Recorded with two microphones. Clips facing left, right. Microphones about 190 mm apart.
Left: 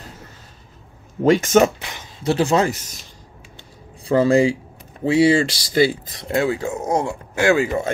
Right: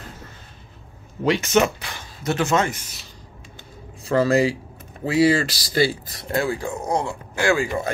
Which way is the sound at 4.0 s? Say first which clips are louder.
Left 3 dB; 30° left (ahead or behind).